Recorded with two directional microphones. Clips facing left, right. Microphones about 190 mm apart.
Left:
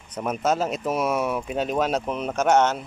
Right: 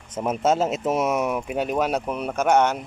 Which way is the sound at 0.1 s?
25° right (ahead or behind).